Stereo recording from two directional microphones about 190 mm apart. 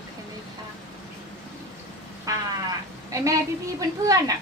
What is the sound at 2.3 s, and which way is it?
Speech, 15° right (ahead or behind).